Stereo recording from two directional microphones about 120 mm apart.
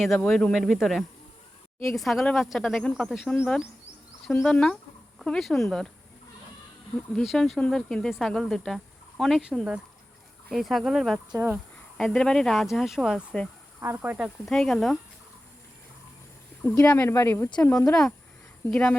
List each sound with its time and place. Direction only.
0.0 s speech: 5° left (ahead or behind)
3.3 s speech: 15° left (ahead or behind)
7.2 s speech: centre (ahead or behind)
11.3 s speech: 15° right (ahead or behind)
11.9 s speech: 5° left (ahead or behind)
13.8 s speech: 15° right (ahead or behind)
14.4 s speech: 5° left (ahead or behind)
16.8 s speech: 15° left (ahead or behind)
17.6 s speech: 10° left (ahead or behind)